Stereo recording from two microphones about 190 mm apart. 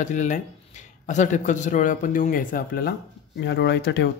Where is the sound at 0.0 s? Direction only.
40° left (ahead or behind).